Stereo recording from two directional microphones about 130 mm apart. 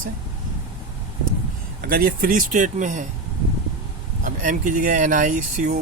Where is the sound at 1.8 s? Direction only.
90° right; by 3.0 s 75° right (ahead or behind).